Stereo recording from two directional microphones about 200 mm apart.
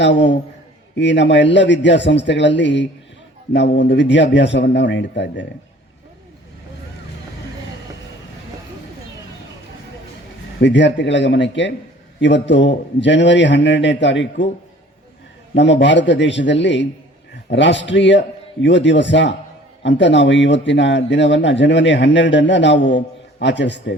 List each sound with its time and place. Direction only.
0.0 s a man's voice: 65° left (ahead or behind)
10.6 s a man's voice: 60° left (ahead or behind)
15.5 s a man's voice: 65° left (ahead or behind)